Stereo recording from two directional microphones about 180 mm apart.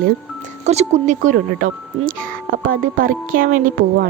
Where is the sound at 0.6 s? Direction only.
40° right (ahead or behind).